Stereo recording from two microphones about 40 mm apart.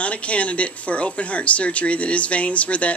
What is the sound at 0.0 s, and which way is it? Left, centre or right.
Speech, left.